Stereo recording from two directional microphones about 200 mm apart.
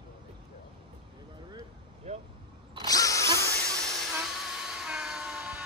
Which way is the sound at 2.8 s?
15° left (ahead or behind).